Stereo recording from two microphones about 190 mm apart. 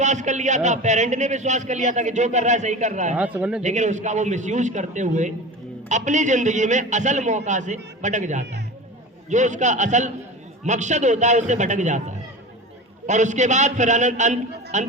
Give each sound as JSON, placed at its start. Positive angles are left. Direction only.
{"t": 0.0, "sound": "a man's voice", "side_deg": -40}
{"t": 3.2, "sound": "speech", "side_deg": -5}
{"t": 3.6, "sound": "a man's voice", "side_deg": -40}